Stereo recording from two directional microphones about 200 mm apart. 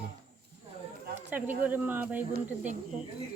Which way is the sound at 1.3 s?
10° right (ahead or behind).